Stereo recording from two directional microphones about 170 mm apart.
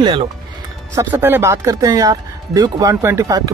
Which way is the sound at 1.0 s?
10° right (ahead or behind).